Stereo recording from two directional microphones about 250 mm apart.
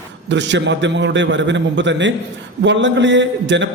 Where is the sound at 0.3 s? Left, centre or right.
Right.